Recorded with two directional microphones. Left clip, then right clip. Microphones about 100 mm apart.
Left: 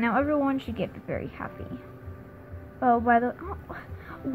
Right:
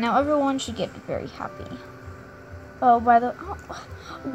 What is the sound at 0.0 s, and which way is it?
Speech, 20° right (ahead or behind).